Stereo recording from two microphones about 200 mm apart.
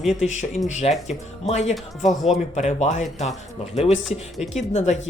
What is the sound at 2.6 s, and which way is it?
Speech, 35° left (ahead or behind).